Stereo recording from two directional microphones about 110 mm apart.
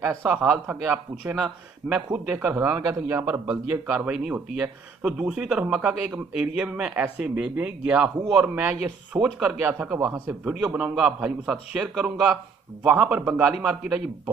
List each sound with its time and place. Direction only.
0.0 s speech: 20° right (ahead or behind); by 2.0 s 5° right (ahead or behind)
2.2 s speech: 15° right (ahead or behind)